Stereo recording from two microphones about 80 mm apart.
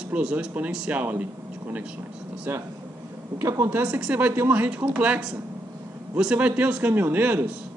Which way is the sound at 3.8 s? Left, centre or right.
Centre.